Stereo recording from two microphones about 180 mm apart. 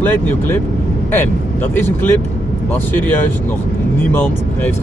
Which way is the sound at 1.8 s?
10° left (ahead or behind).